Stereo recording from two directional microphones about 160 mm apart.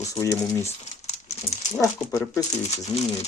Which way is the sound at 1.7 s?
15° left (ahead or behind).